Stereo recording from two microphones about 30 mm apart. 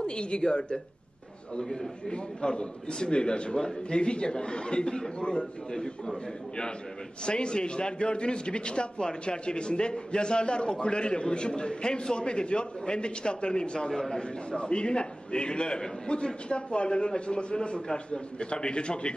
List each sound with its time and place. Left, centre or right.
0.0 s a man's voice: left
13.9 s a man's voice: centre
14.5 s a man's voice: left